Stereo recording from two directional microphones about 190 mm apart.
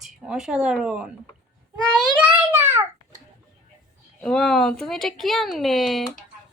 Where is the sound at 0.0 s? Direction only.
Centre (ahead or behind).